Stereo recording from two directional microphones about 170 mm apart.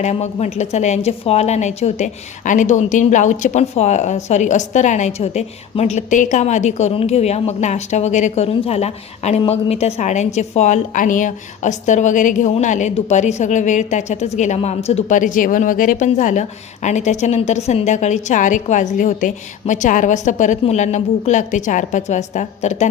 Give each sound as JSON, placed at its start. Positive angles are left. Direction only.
{"t": 0.0, "sound": "a woman's voice", "side_deg": 40}